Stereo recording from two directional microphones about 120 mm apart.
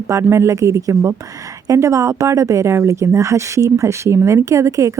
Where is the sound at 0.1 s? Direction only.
25° right (ahead or behind).